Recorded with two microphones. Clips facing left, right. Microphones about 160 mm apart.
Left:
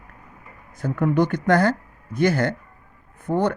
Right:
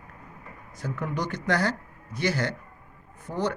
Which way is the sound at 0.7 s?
55° left (ahead or behind).